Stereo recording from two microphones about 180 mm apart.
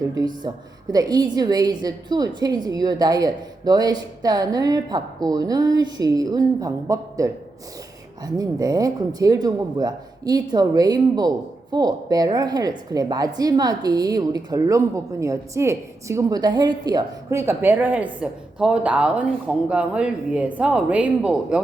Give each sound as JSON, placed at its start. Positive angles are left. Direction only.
{"t": 0.1, "sound": "speech", "side_deg": -20}